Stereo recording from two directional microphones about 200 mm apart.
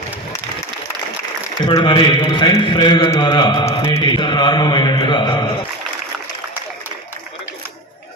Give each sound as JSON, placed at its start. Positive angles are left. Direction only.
{"t": 1.6, "sound": "a man's voice", "side_deg": 20}